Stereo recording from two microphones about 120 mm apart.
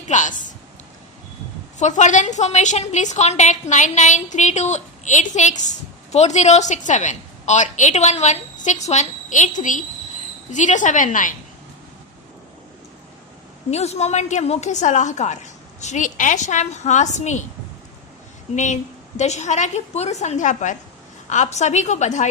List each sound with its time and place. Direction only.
0.1 s a woman's voice: 90° left
1.8 s a woman's voice: 85° left
13.7 s a woman's voice: 65° left (ahead or behind)
18.5 s a woman's voice: 85° left